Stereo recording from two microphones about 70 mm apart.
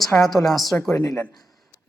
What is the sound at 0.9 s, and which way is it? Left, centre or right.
Speech, left.